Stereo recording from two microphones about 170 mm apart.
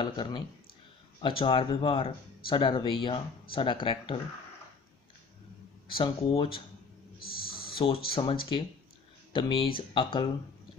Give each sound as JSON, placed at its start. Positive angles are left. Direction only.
{"t": 0.0, "sound": "speech", "side_deg": 30}
{"t": 5.9, "sound": "speech", "side_deg": 30}
{"t": 7.5, "sound": "a sound", "side_deg": 30}
{"t": 8.1, "sound": "speech", "side_deg": 30}